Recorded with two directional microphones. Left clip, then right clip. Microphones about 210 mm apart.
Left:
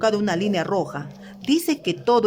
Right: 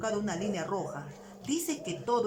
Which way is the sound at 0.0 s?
50° left (ahead or behind).